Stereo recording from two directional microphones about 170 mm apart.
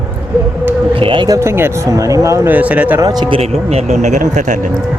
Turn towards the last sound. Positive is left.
turn(degrees=-45)  # may be behind; listen again after turning